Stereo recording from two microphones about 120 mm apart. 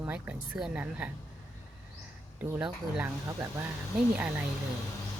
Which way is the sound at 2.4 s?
15° right (ahead or behind).